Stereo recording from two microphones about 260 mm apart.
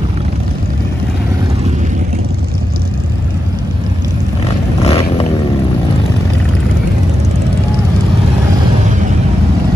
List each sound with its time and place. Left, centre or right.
4.8 s vehicle: left